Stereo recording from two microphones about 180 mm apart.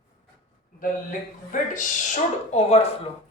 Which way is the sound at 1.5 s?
45° left (ahead or behind).